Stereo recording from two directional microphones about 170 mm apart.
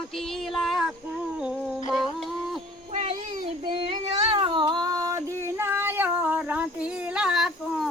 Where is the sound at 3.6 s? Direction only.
30° right (ahead or behind).